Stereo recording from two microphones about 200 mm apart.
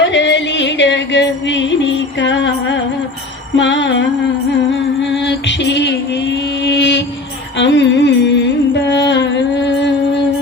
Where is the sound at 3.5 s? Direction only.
65° left (ahead or behind).